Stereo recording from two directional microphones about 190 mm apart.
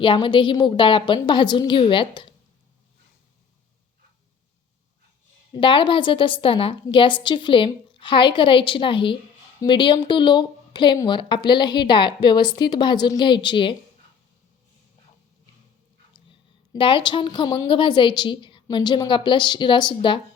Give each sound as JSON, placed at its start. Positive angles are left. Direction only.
{"t": 0.0, "sound": "a woman's voice", "side_deg": 25}
{"t": 5.5, "sound": "a woman's voice", "side_deg": 25}
{"t": 16.7, "sound": "a woman's voice", "side_deg": 25}